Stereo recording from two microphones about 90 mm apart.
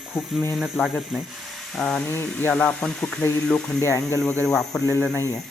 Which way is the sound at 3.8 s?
30° left (ahead or behind).